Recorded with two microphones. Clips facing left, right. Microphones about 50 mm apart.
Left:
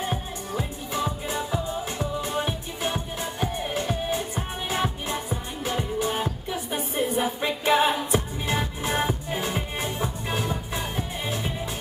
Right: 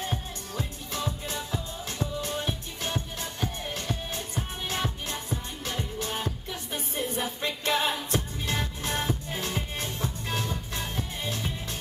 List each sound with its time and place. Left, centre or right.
0.0 s music: centre